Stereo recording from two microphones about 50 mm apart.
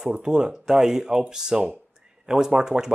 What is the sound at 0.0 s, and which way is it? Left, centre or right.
Speech, centre.